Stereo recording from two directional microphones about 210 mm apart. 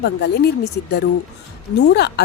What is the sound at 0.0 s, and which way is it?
A woman's voice, 55° left (ahead or behind).